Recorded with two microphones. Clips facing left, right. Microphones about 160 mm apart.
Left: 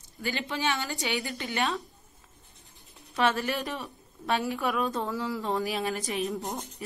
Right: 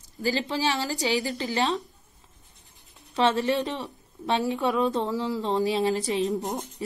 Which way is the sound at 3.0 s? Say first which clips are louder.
Right 3 dB; 25° right (ahead or behind).